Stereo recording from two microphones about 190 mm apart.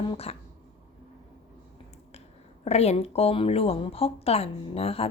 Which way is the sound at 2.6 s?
35° left (ahead or behind).